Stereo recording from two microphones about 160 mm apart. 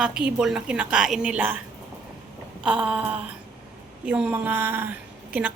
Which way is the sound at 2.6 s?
5° right (ahead or behind).